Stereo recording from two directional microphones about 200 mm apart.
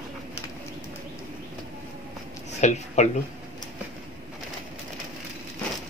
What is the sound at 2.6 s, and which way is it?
Speech, 35° left (ahead or behind).